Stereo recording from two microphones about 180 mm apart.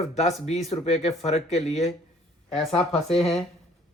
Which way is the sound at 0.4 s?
35° left (ahead or behind).